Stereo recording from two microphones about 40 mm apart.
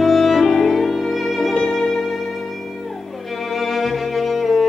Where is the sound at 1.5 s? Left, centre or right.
Left.